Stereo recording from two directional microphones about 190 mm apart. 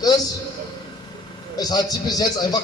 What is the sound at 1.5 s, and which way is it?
A man's voice, 20° left (ahead or behind).